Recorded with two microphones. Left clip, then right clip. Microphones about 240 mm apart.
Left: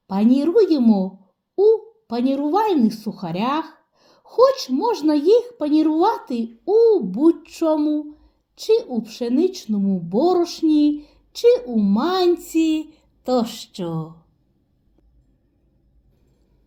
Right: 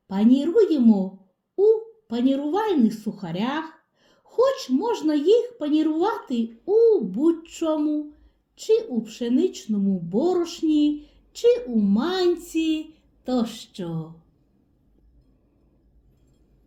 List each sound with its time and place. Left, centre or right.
0.1 s speech: left